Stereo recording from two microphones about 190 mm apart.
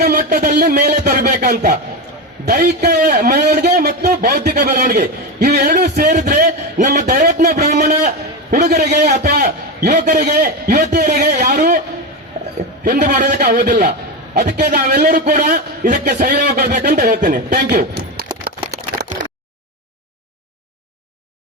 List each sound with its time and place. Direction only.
0.1 s a man's voice: 45° right (ahead or behind)
5.4 s a sound: 55° right (ahead or behind)
9.9 s a man's voice: 40° right (ahead or behind)
11.0 s a sound: 40° right (ahead or behind)
12.8 s a man's voice: 45° right (ahead or behind)
14.3 s a man's voice: 55° right (ahead or behind)